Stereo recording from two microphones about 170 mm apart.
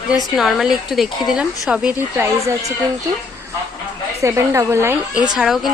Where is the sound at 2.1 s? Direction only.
15° right (ahead or behind).